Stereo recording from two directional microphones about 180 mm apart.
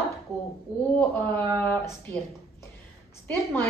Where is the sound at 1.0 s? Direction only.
10° left (ahead or behind).